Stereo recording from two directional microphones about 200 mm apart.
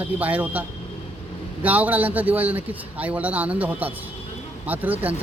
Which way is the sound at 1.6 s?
10° right (ahead or behind).